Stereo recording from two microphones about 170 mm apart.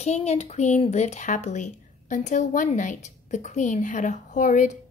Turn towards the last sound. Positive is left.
turn(degrees=45)  # may be behind; listen again after turning